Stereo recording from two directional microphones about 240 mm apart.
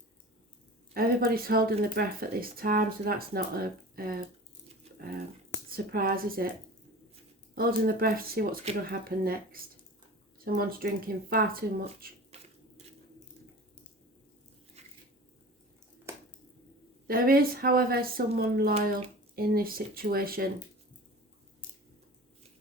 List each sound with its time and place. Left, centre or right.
0.9 s speech: right
5.7 s speech: right
7.5 s speech: right
14.8 s a sound: right
16.1 s a sound: centre
17.1 s speech: right